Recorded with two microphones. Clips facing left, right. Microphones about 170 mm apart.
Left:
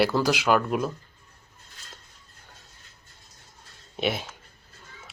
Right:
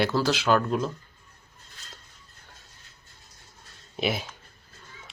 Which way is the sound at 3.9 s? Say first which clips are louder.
Left 1 dB; centre (ahead or behind).